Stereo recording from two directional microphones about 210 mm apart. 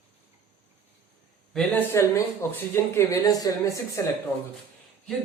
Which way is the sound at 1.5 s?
5° left (ahead or behind).